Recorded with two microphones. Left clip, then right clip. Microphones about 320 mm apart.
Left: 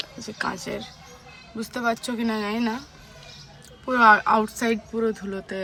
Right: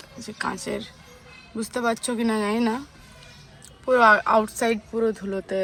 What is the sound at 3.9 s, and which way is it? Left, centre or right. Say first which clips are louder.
Speech: even; centre.